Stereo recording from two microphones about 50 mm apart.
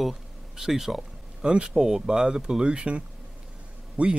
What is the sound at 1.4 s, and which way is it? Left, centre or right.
Speech, centre.